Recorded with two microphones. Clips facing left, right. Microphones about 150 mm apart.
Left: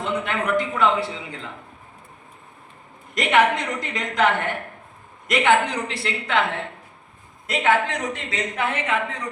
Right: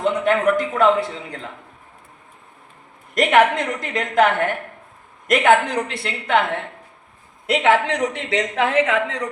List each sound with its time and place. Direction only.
0.0 s a man's voice: 45° right (ahead or behind)
3.2 s a man's voice: 50° right (ahead or behind)
7.4 s speech: 75° right (ahead or behind)